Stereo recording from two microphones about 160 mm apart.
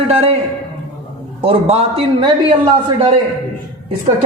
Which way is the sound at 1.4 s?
35° right (ahead or behind).